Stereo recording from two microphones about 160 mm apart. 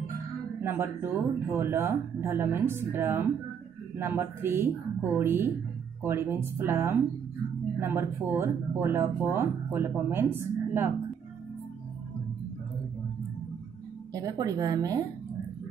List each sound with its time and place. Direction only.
0.6 s speech: 15° right (ahead or behind)
14.1 s a woman's voice: 20° right (ahead or behind)